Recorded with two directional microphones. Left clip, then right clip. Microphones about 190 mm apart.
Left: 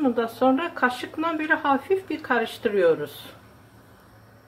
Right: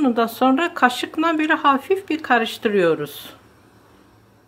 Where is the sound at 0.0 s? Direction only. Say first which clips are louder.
Right 4 dB; 45° right (ahead or behind).